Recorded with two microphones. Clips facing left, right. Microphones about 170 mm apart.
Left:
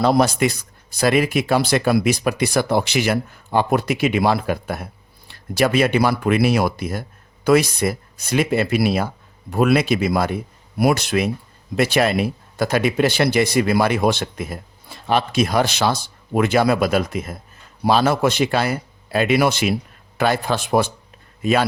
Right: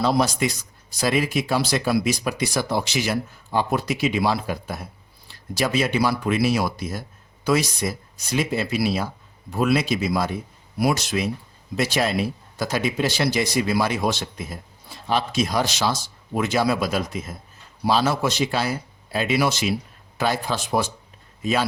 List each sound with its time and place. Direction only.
0.0 s speech: 60° left (ahead or behind)